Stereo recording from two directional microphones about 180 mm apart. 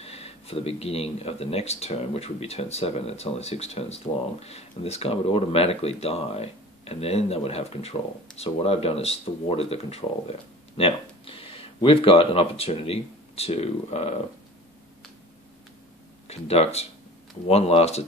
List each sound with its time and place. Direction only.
0.0 s speech: 35° left (ahead or behind)
16.3 s speech: 35° left (ahead or behind)